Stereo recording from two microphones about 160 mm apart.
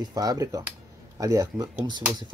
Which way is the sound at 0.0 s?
25° right (ahead or behind).